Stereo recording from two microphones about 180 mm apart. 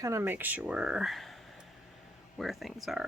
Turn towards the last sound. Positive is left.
turn(degrees=0)  # may be behind; listen again after turning